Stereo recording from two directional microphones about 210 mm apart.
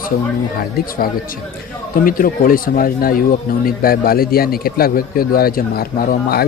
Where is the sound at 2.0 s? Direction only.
40° left (ahead or behind).